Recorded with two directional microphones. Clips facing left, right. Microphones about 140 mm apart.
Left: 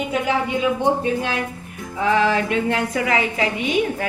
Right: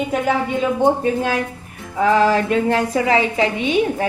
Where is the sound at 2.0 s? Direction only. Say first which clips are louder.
Right 3 dB; 40° right (ahead or behind).